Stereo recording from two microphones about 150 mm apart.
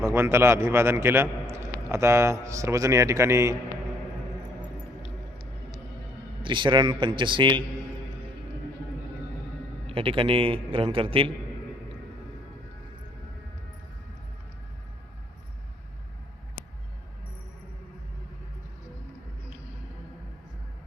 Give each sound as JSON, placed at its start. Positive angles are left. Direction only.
{"t": 0.0, "sound": "a man's voice", "side_deg": -15}
{"t": 6.4, "sound": "a man's voice", "side_deg": -30}
{"t": 9.8, "sound": "a man's voice", "side_deg": -35}